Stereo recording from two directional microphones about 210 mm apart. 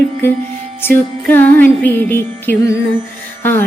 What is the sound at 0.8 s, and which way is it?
Music, 10° left (ahead or behind).